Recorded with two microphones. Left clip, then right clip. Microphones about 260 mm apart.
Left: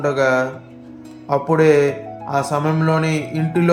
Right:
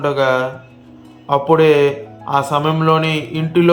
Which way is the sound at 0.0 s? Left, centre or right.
Centre.